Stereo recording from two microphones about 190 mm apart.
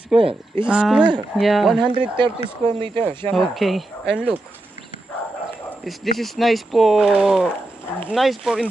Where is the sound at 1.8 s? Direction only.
25° right (ahead or behind).